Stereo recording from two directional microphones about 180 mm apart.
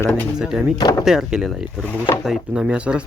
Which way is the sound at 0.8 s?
20° left (ahead or behind).